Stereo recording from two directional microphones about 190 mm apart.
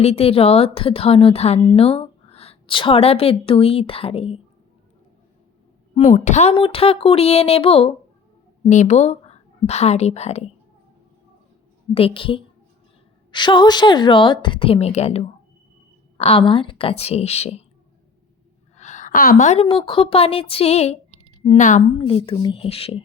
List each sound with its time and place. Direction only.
0.0 s speech: 30° left (ahead or behind)
5.9 s a woman's voice: 40° left (ahead or behind)
11.9 s a woman's voice: 30° left (ahead or behind)
18.8 s a sound: 40° left (ahead or behind)
19.6 s a woman's voice: 25° left (ahead or behind)
21.9 s a woman's voice: 30° left (ahead or behind)